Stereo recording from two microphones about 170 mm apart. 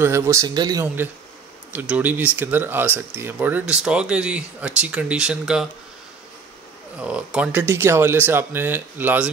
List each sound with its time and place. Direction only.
0.0 s speech: 15° right (ahead or behind)
1.7 s speech: 10° right (ahead or behind)
7.0 s speech: 5° right (ahead or behind)